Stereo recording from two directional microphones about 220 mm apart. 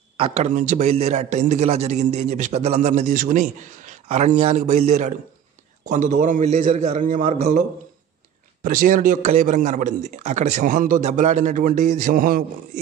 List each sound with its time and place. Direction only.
0.2 s a man's voice: 30° right (ahead or behind)
8.6 s a man's voice: 40° right (ahead or behind)